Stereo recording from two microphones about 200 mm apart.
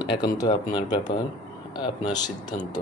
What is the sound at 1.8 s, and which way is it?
Speech, 20° left (ahead or behind).